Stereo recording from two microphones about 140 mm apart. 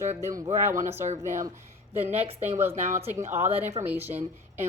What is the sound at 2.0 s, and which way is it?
Speech, 15° right (ahead or behind).